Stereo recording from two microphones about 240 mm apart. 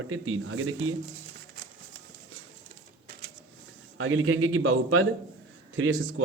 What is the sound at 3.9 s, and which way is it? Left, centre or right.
A man's voice, right.